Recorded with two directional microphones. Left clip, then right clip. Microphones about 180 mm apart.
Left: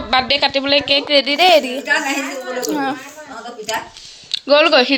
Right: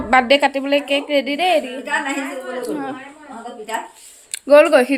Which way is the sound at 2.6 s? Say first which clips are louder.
Left 7 dB; 45° left (ahead or behind).